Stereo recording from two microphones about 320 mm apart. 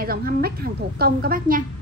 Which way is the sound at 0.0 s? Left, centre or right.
Right.